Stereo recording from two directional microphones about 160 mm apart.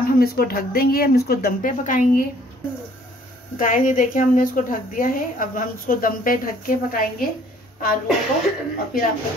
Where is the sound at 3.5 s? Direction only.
55° left (ahead or behind).